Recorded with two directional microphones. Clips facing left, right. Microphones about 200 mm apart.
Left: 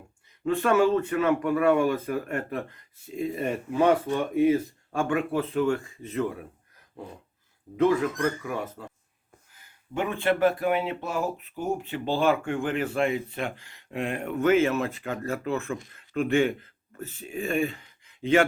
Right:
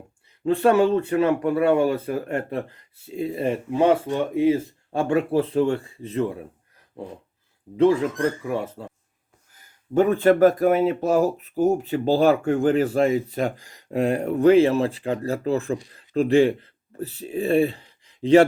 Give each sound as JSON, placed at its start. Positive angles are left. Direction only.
{"t": 0.4, "sound": "speech", "side_deg": -35}
{"t": 7.8, "sound": "speech", "side_deg": -30}
{"t": 9.5, "sound": "speech", "side_deg": -40}